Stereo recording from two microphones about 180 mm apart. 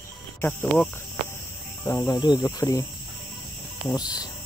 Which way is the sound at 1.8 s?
20° left (ahead or behind).